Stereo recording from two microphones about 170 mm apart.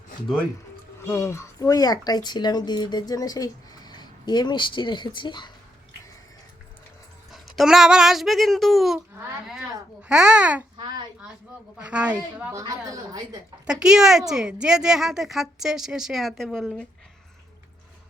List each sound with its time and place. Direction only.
1.0 s speech: 15° left (ahead or behind)
7.3 s speech: centre (ahead or behind)
10.1 s a woman's voice: 5° right (ahead or behind)
10.8 s a sound: 25° right (ahead or behind)
11.8 s a woman's voice: 5° right (ahead or behind)
12.5 s a woman's voice: 20° right (ahead or behind)
13.7 s a woman's voice: 5° right (ahead or behind)